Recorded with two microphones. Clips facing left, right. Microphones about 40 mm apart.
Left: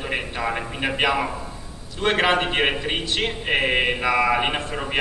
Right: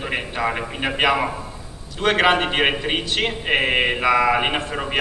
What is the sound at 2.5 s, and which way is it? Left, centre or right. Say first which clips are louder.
A man's voice: right 2 dB; centre.